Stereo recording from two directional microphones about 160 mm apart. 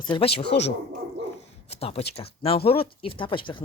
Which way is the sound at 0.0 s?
30° left (ahead or behind).